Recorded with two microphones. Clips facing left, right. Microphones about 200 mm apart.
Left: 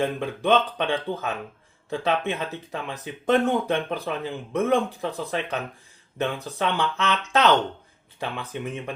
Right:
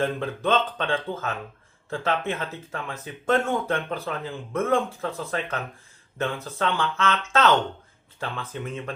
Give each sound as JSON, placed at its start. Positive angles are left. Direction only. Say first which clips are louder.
{"t": 0.0, "sound": "speech", "louder": "even", "side_deg": 15}